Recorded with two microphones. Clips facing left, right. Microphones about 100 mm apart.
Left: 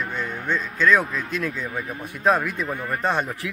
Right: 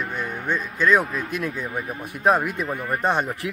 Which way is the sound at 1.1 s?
25° right (ahead or behind).